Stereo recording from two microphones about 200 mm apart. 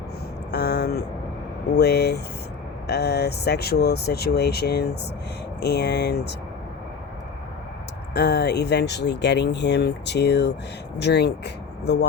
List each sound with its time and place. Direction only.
0.5 s speech: 55° left (ahead or behind)
8.1 s speech: 55° left (ahead or behind)